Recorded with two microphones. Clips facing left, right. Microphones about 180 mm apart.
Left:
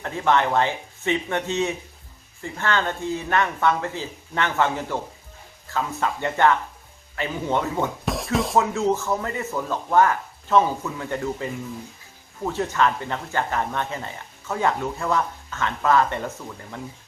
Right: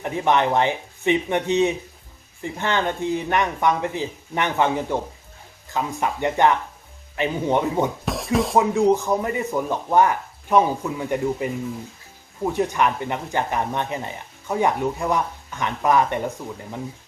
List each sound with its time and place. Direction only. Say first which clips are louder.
0.0 s speech: right 1 dB; 15° right (ahead or behind)
8.0 s speech: right 2 dB; centre (ahead or behind)
8.5 s speech: right 4 dB; 15° right (ahead or behind)
12.5 s speech: right 1 dB; 15° right (ahead or behind)